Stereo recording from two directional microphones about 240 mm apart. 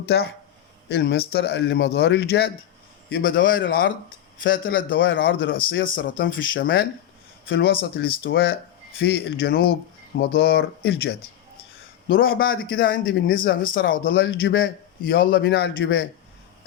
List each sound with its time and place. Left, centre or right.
0.9 s a man's voice: left
4.9 s speech: left
5.8 s a man's voice: left
6.2 s a man's voice: left